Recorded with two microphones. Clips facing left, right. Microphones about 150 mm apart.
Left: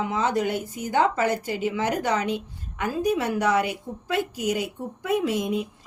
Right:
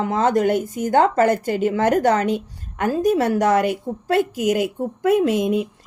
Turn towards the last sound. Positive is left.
turn(degrees=-60)  # may be behind; listen again after turning